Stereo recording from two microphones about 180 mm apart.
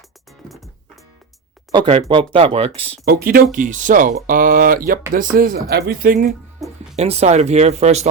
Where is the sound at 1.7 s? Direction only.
30° right (ahead or behind).